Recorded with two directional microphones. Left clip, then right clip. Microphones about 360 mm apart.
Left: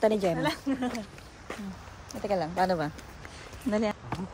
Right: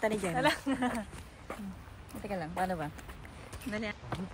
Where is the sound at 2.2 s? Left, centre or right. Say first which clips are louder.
Left 8 dB; centre.